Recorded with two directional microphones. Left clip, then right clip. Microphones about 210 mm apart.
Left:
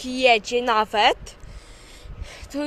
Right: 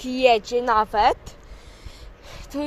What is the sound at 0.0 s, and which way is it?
Speech, centre (ahead or behind).